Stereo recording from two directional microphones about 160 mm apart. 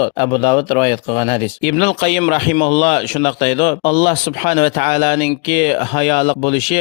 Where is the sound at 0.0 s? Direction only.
30° left (ahead or behind).